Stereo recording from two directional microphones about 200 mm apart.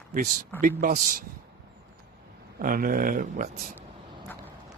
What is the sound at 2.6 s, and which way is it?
Speech, 45° right (ahead or behind).